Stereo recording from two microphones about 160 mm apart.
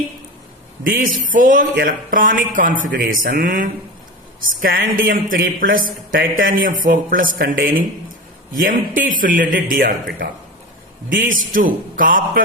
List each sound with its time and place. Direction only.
0.9 s speech: 60° right (ahead or behind)